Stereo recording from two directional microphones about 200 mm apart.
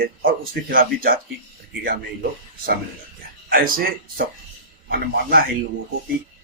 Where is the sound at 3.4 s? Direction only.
45° right (ahead or behind).